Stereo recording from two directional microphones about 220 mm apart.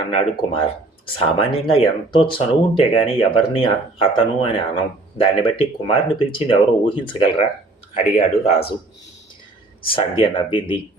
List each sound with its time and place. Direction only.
0.1 s speech: 25° left (ahead or behind)
9.9 s speech: 25° left (ahead or behind)